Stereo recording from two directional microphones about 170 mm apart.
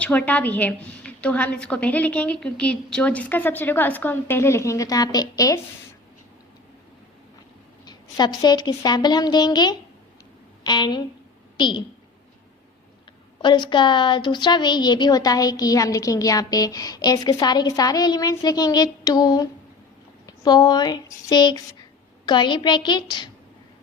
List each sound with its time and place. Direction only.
0.0 s a woman's voice: 10° left (ahead or behind)
7.9 s a woman's voice: 25° left (ahead or behind)
13.4 s a woman's voice: 25° left (ahead or behind)